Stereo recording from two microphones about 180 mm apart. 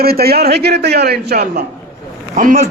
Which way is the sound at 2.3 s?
50° right (ahead or behind).